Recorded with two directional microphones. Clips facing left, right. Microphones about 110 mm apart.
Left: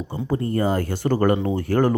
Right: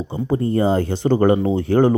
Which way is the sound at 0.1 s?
25° right (ahead or behind).